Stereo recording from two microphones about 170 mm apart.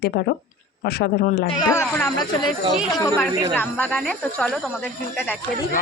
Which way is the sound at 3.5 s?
10° left (ahead or behind).